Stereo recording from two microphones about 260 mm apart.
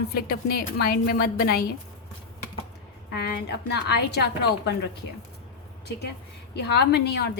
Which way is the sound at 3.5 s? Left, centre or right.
Left.